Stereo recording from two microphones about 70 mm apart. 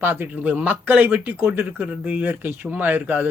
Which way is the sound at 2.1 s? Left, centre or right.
Right.